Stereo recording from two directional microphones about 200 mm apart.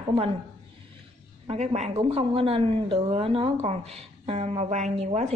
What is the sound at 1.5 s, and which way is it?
A woman's voice, 35° right (ahead or behind).